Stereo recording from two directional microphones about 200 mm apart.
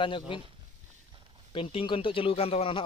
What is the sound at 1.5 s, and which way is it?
Speech, 25° left (ahead or behind).